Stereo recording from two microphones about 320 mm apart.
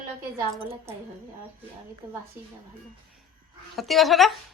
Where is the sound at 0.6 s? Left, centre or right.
Centre.